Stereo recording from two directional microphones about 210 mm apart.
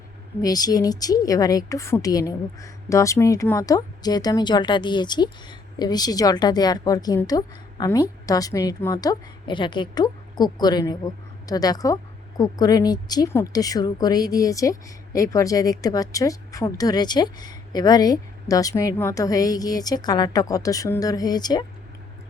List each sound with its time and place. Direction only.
0.4 s a woman's voice: 20° left (ahead or behind)